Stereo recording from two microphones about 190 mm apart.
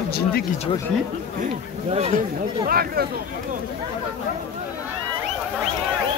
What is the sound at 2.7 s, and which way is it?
Speech, 50° right (ahead or behind).